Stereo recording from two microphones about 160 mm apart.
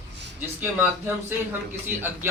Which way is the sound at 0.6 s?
10° right (ahead or behind).